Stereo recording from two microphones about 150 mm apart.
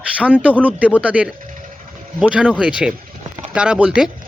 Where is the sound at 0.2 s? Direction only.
5° right (ahead or behind).